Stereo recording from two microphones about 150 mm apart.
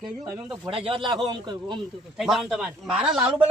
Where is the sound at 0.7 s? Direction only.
35° right (ahead or behind).